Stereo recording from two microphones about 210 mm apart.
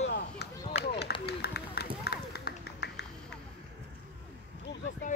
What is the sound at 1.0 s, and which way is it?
Run, 50° left (ahead or behind).